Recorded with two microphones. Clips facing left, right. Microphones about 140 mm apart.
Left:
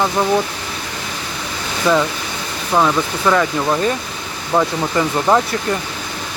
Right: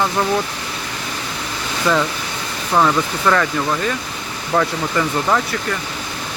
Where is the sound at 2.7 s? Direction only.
10° left (ahead or behind).